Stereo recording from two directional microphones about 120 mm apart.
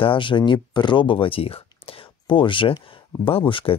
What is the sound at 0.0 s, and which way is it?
Speech, 45° left (ahead or behind).